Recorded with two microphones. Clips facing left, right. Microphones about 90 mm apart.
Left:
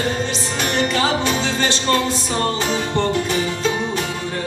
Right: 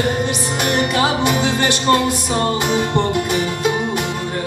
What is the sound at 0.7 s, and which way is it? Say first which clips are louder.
Music: right 2 dB; 15° right (ahead or behind).